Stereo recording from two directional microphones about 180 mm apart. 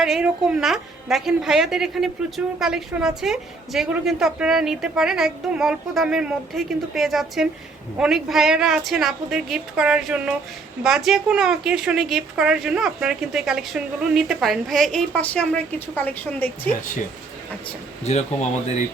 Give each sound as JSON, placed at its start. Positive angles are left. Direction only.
{"t": 0.0, "sound": "a woman's voice", "side_deg": -5}
{"t": 18.0, "sound": "speech", "side_deg": 35}